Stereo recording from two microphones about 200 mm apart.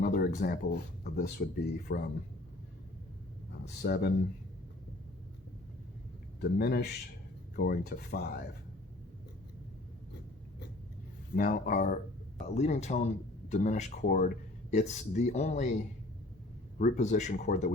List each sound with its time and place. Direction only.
0.0 s speech: 50° left (ahead or behind)
3.8 s speech: 55° left (ahead or behind)
6.4 s speech: 50° left (ahead or behind)
11.3 s speech: 40° left (ahead or behind)